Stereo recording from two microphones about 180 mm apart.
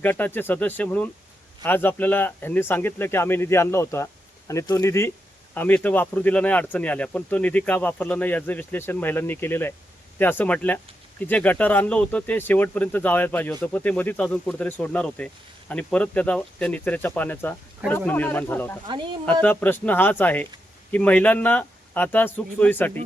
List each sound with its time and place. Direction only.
0.0 s speech: 10° left (ahead or behind)
18.9 s speech: 25° right (ahead or behind)
19.2 s speech: 10° left (ahead or behind)